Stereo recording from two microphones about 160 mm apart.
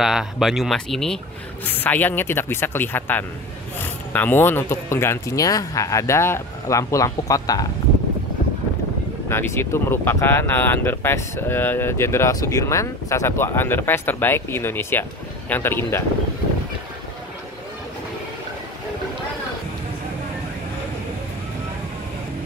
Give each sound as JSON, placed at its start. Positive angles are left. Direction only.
{"t": 0.0, "sound": "speech", "side_deg": -5}
{"t": 9.3, "sound": "speech", "side_deg": 15}